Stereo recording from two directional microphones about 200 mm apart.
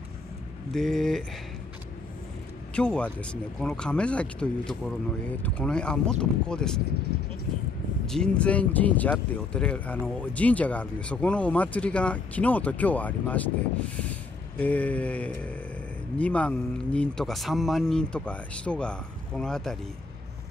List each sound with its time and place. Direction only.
0.7 s speech: centre (ahead or behind)
2.7 s speech: 5° left (ahead or behind)
8.1 s speech: 5° left (ahead or behind)